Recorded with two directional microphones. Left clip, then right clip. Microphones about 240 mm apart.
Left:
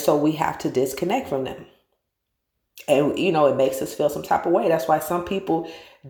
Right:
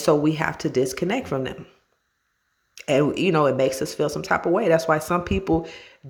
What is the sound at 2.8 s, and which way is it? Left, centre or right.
Speech, right.